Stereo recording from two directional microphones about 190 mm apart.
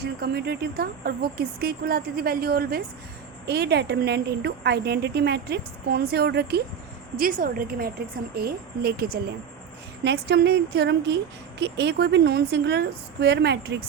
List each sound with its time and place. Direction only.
0.0 s speech: 55° right (ahead or behind)
7.2 s speech: 45° right (ahead or behind); by 13.8 s 60° right (ahead or behind)